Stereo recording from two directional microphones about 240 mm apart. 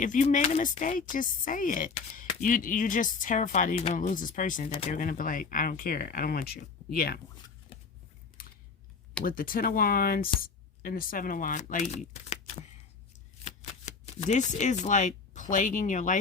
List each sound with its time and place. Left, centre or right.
0.0 s speech: left
8.4 s typing: left
9.2 s speech: left